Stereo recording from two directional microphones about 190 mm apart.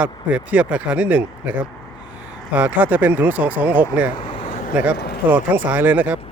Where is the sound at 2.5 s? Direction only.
10° right (ahead or behind).